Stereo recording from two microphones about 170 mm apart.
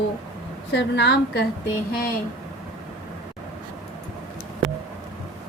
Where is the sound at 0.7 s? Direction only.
85° left.